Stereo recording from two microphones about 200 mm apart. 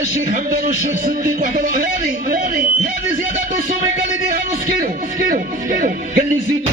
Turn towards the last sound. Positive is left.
turn(degrees=-40)  # may be behind; listen again after turning